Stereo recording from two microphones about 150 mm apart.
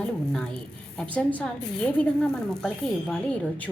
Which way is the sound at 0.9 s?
10° left (ahead or behind).